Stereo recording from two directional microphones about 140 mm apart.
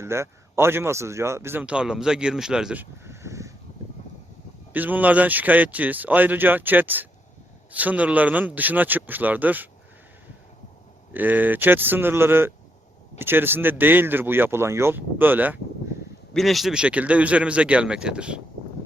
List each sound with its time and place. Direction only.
0.0 s speech: 20° right (ahead or behind)
3.0 s a sound: 20° right (ahead or behind)
4.7 s speech: 10° right (ahead or behind)
11.1 s speech: 10° right (ahead or behind)
16.3 s speech: centre (ahead or behind)